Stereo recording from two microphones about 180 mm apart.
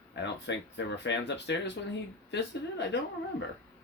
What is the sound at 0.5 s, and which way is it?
Speech, 75° left (ahead or behind).